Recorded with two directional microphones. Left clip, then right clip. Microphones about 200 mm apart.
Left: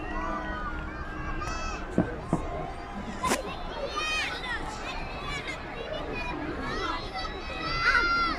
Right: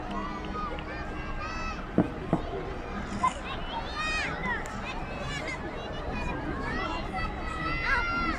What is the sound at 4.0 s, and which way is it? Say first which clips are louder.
Run: left 1 dB; 25° right (ahead or behind).